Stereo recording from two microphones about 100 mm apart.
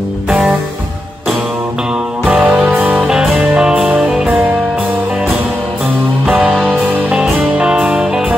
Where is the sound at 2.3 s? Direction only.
20° right (ahead or behind).